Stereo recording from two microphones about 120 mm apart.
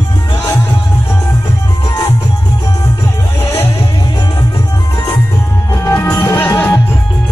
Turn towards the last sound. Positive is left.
turn(degrees=20)  # may be behind; listen again after turning